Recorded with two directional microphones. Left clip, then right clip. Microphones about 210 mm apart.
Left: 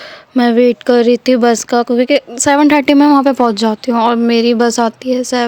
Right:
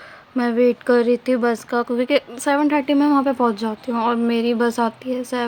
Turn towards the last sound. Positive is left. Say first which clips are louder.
# left 9 dB
turn(degrees=35)  # may be behind; listen again after turning